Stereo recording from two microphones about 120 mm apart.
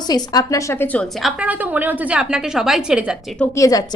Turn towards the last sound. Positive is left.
turn(degrees=30)  # may be behind; listen again after turning